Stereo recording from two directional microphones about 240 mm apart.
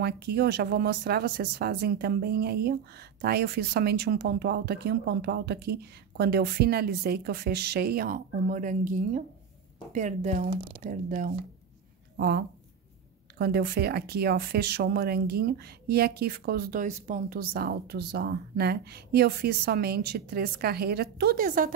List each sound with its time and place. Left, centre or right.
0.0 s speech: right